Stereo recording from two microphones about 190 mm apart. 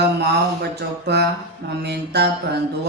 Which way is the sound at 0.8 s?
60° right (ahead or behind).